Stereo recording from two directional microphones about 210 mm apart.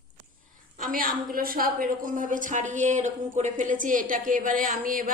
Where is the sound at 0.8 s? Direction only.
40° right (ahead or behind).